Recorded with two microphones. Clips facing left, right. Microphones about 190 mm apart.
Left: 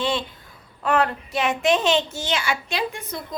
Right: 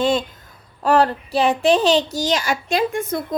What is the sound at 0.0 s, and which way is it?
Speech, 45° right (ahead or behind).